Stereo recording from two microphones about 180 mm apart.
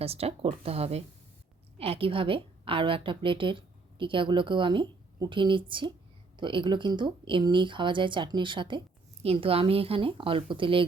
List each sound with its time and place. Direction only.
0.0 s a woman's voice: 35° right (ahead or behind)